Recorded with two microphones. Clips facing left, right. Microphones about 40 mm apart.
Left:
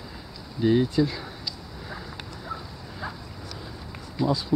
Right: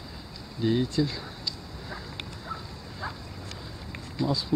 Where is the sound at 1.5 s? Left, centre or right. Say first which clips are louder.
Left 1 dB; centre.